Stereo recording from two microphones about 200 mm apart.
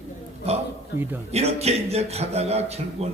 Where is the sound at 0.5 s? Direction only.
30° right (ahead or behind).